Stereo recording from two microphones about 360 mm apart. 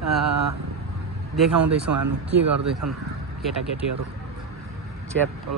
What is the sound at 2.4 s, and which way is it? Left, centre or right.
Speech, right.